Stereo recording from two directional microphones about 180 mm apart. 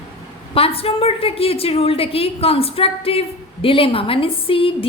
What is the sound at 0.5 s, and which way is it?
Speech, 30° left (ahead or behind).